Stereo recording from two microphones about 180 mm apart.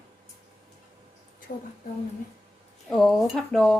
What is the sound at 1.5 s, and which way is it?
Speech, 50° left (ahead or behind).